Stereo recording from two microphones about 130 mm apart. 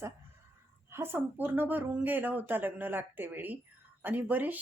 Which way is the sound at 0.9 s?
15° right (ahead or behind).